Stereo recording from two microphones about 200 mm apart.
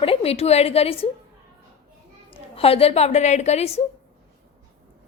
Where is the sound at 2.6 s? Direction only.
30° left (ahead or behind).